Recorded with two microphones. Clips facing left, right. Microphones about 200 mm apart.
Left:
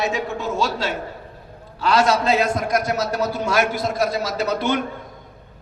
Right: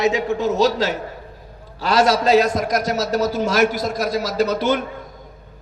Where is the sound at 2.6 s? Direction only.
40° right (ahead or behind).